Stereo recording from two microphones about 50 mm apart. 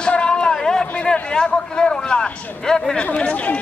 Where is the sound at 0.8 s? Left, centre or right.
Left.